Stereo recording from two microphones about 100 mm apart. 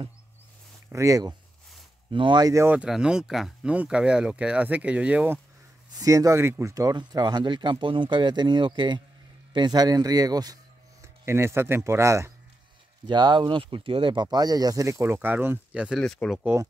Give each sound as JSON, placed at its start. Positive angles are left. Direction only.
{"t": 0.9, "sound": "speech", "side_deg": -35}
{"t": 2.0, "sound": "speech", "side_deg": -55}
{"t": 2.4, "sound": "speech", "side_deg": -30}
{"t": 2.7, "sound": "speech", "side_deg": -10}
{"t": 5.9, "sound": "speech", "side_deg": -35}
{"t": 11.0, "sound": "speech", "side_deg": -25}
{"t": 13.0, "sound": "speech", "side_deg": -45}
{"t": 15.1, "sound": "speech", "side_deg": -15}
{"t": 16.0, "sound": "speech", "side_deg": 5}